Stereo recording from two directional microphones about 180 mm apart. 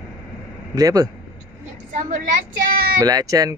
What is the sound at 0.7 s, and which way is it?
Speech, 20° right (ahead or behind).